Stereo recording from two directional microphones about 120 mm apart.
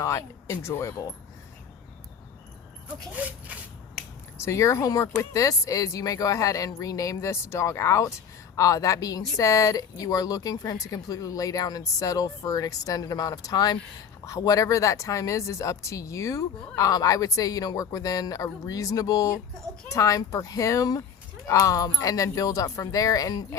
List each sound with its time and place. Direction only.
0.0 s speech: 25° left (ahead or behind)
3.1 s speech: 10° right (ahead or behind)
4.4 s speech: 25° left (ahead or behind)